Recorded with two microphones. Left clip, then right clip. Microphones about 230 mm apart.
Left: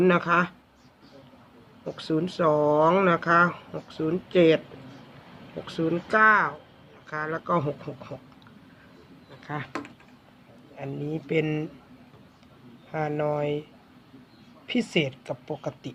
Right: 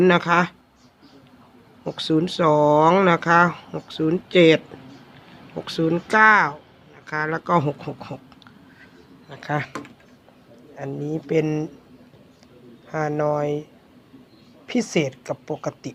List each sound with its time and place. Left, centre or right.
0.0 s speech: right
1.8 s speech: right
5.6 s speech: right
9.3 s speech: right
10.8 s a woman's voice: centre
12.9 s a woman's voice: centre
14.7 s a woman's voice: centre